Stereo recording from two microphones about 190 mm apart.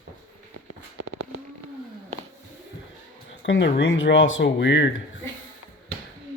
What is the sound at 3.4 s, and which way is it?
Speech, 75° left (ahead or behind).